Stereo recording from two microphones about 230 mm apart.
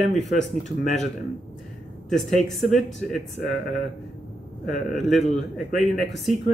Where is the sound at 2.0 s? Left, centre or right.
Centre.